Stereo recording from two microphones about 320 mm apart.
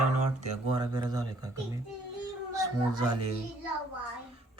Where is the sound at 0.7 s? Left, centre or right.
Centre.